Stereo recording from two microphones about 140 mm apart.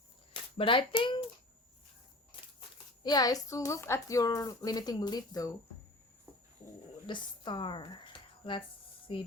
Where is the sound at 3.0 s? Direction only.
25° left (ahead or behind).